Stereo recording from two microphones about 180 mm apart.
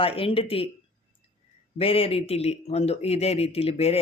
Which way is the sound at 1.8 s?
30° left (ahead or behind).